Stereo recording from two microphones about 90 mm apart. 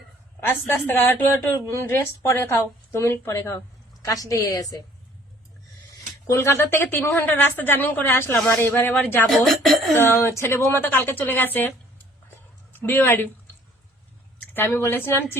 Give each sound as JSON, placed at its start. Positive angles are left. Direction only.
{"t": 0.3, "sound": "speech", "side_deg": 25}
{"t": 4.0, "sound": "a woman's voice", "side_deg": 40}
{"t": 6.2, "sound": "speech", "side_deg": 30}
{"t": 9.2, "sound": "speech", "side_deg": 0}
{"t": 10.2, "sound": "speech", "side_deg": 30}
{"t": 12.8, "sound": "speech", "side_deg": 25}
{"t": 14.5, "sound": "speech", "side_deg": 25}